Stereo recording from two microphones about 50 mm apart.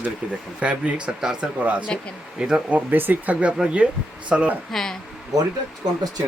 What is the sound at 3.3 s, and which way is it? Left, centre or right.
Speech, right.